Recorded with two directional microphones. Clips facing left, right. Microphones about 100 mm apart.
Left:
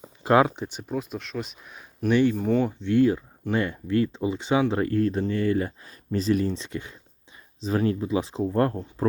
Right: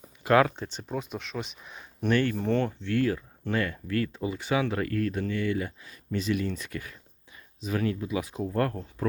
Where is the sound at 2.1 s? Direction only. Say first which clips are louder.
Left 4 dB; 15° left (ahead or behind); by 6.5 s 35° left (ahead or behind).